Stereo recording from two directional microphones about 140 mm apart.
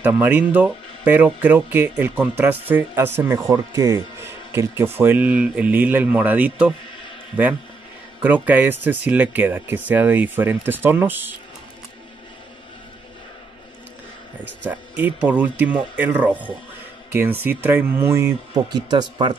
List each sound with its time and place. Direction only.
0.0 s speech: 10° right (ahead or behind)
8.2 s speech: 10° right (ahead or behind)
14.7 s speech: 10° right (ahead or behind)
18.5 s speech: 30° right (ahead or behind)